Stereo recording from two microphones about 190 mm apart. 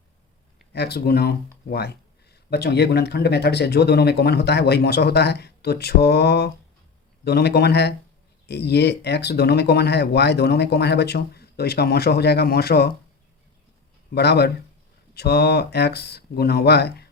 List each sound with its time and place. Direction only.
0.7 s speech: 60° left (ahead or behind)
14.1 s speech: 60° left (ahead or behind)